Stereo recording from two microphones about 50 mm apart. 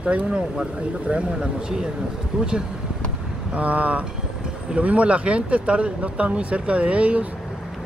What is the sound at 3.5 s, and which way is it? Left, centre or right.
Speech, right.